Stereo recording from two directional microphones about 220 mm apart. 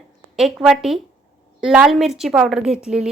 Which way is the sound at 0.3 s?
Centre (ahead or behind).